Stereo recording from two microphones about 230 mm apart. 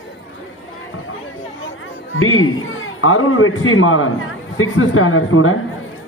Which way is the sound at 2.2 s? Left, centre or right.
Left.